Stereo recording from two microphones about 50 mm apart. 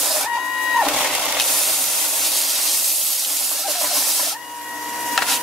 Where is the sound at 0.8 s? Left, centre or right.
Centre.